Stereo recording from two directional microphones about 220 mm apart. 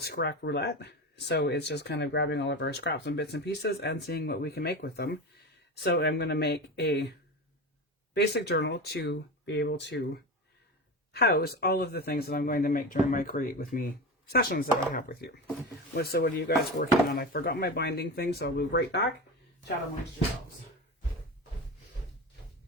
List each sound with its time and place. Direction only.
0.0 s speech: 45° left (ahead or behind)
8.1 s speech: 50° left (ahead or behind)
11.1 s speech: 45° left (ahead or behind)